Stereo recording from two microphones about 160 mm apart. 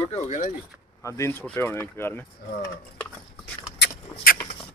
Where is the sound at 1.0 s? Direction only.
20° left (ahead or behind).